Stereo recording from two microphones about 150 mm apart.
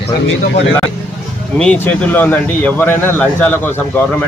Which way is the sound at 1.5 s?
10° left (ahead or behind).